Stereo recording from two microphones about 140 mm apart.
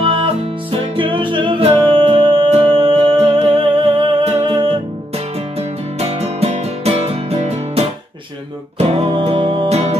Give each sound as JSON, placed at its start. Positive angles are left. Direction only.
{"t": 0.0, "sound": "music", "side_deg": -40}